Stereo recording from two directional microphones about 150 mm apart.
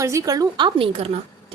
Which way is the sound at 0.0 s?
20° right (ahead or behind).